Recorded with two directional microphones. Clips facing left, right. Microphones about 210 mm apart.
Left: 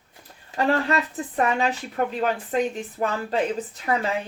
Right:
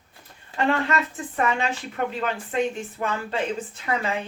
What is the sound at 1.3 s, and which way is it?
A woman's voice, 40° left (ahead or behind).